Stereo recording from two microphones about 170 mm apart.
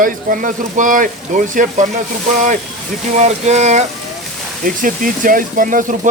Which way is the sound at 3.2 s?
40° right (ahead or behind).